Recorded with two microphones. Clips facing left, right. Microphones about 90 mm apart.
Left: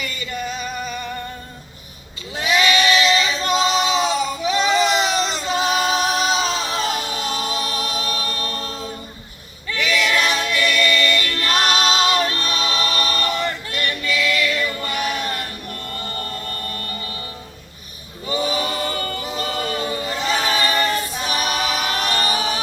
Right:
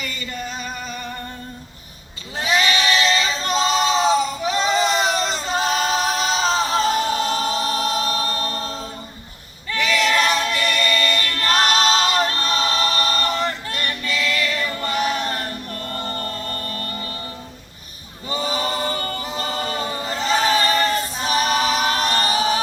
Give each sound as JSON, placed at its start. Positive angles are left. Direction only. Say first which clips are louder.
{"t": 2.3, "sound": "singing", "louder": "left 2 dB", "side_deg": -35}
{"t": 9.6, "sound": "choir", "louder": "right 1 dB", "side_deg": -35}
{"t": 18.3, "sound": "choir", "louder": "left 1 dB", "side_deg": -35}